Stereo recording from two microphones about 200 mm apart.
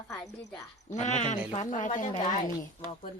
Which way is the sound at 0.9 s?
40° left (ahead or behind).